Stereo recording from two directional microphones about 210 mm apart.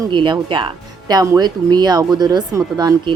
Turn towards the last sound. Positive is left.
turn(degrees=-20)  # may be behind; listen again after turning